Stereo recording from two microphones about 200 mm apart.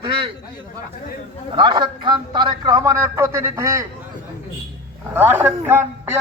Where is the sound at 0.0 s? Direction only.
25° right (ahead or behind).